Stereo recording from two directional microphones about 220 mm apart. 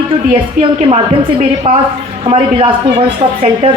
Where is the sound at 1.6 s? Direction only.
25° right (ahead or behind).